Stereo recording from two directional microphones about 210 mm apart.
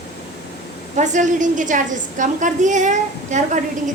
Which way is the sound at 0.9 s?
35° right (ahead or behind).